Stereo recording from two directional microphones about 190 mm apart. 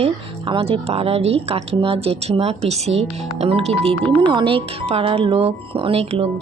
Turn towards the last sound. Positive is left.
turn(degrees=-30)  # may be behind; listen again after turning